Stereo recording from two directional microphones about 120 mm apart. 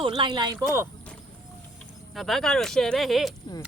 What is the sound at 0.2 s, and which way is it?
Speech, 40° right (ahead or behind).